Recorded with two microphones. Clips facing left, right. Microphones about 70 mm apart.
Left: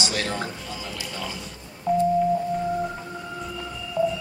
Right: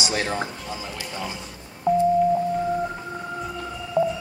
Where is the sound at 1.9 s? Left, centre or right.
Right.